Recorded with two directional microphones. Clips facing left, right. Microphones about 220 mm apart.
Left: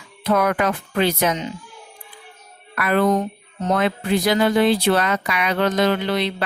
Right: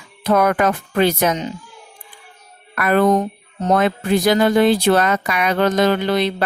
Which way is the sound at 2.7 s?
45° right (ahead or behind).